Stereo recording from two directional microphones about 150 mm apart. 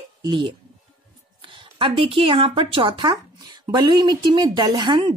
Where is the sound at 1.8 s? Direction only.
35° right (ahead or behind).